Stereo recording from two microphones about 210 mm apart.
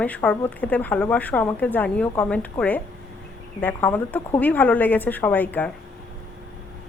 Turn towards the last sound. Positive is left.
turn(degrees=5)  # may be behind; listen again after turning